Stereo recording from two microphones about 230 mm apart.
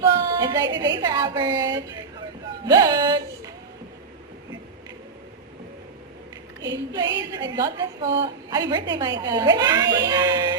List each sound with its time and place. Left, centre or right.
0.0 s a sound: centre
0.8 s a woman's voice: centre
6.7 s a woman's voice: centre